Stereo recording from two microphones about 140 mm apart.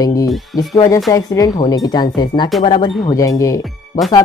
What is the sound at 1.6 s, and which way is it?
Speech, 25° left (ahead or behind).